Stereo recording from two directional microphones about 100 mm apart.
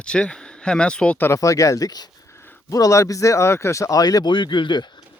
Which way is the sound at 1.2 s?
30° left (ahead or behind).